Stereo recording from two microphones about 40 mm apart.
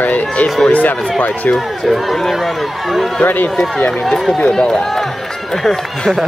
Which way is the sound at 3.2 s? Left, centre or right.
Left.